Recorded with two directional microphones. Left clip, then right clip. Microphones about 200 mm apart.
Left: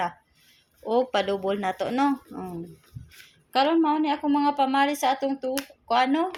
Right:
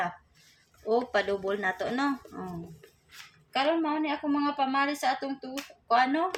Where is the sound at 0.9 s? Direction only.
30° left (ahead or behind).